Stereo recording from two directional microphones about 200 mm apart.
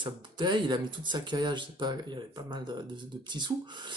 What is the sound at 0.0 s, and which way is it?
Speech, 25° right (ahead or behind).